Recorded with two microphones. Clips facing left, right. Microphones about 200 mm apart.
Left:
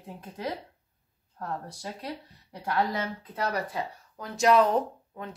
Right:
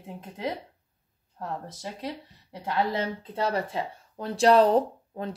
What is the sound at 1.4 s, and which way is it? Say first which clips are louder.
Speech: right 1 dB; 20° right (ahead or behind).